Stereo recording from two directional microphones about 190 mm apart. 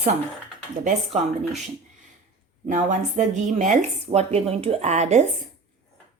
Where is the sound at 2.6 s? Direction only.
40° right (ahead or behind).